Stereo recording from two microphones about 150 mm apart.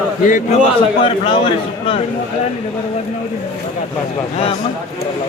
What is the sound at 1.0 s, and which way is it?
Speech, 35° left (ahead or behind).